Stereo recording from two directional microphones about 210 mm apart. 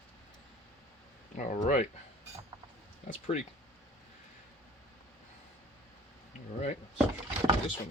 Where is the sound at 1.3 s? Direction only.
35° left (ahead or behind).